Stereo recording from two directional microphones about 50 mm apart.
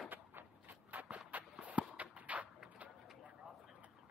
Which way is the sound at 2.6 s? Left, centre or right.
Right.